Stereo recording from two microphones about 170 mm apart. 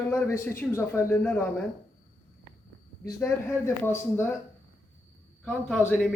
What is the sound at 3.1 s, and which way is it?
Speech, 15° left (ahead or behind).